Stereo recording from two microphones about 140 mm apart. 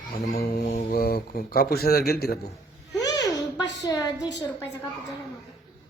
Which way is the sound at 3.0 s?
25° left (ahead or behind).